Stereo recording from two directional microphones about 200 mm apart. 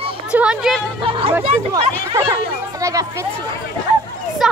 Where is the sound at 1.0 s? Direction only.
25° right (ahead or behind).